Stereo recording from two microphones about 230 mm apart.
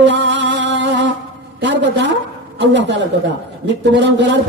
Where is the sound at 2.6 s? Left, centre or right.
Right.